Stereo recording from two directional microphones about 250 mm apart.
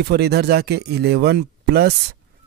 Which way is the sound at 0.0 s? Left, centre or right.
Right.